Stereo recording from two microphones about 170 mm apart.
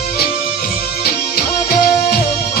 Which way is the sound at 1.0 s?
65° left (ahead or behind).